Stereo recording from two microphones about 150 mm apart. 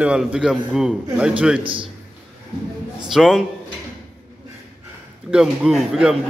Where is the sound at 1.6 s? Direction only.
35° right (ahead or behind).